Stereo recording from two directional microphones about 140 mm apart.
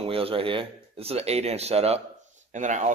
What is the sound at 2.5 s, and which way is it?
Speech, 60° right (ahead or behind).